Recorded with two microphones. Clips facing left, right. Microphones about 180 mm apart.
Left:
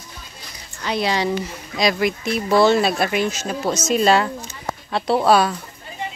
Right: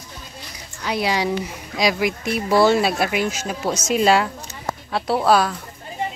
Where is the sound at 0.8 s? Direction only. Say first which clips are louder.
Left 1 dB; 10° right (ahead or behind).